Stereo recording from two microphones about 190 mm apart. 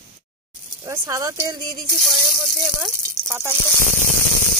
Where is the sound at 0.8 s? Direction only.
15° right (ahead or behind).